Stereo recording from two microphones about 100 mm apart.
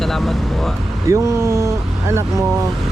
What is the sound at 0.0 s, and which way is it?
Vehicle, centre (ahead or behind).